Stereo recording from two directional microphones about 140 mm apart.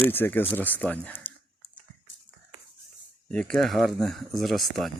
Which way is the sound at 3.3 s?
5° left (ahead or behind).